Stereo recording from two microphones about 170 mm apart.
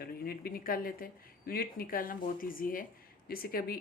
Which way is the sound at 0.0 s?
65° left (ahead or behind).